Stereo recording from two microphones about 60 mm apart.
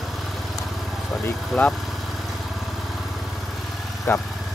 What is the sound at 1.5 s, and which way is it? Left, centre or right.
Speech, centre.